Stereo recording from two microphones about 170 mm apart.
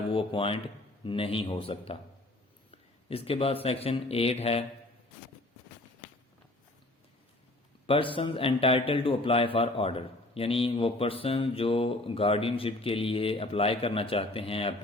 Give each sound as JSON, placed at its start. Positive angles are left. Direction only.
{"t": 0.1, "sound": "a man's voice", "side_deg": 30}
{"t": 3.1, "sound": "a man's voice", "side_deg": 35}
{"t": 7.9, "sound": "a man's voice", "side_deg": 30}